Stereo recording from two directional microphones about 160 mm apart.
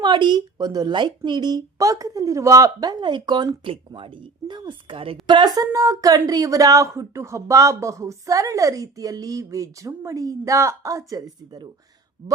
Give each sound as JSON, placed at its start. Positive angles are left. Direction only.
{"t": 0.0, "sound": "speech", "side_deg": -30}